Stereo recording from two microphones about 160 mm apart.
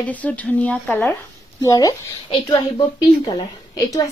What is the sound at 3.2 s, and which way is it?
Speech, 25° left (ahead or behind).